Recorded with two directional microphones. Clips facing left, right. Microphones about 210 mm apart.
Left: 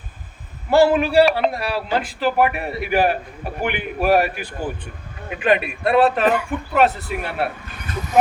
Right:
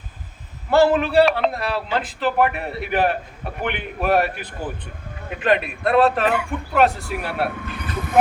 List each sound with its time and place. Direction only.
0.7 s a man's voice: 10° left (ahead or behind)
7.6 s speech: 55° right (ahead or behind)